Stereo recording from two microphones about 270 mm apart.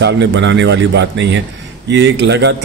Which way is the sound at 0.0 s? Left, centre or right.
Right.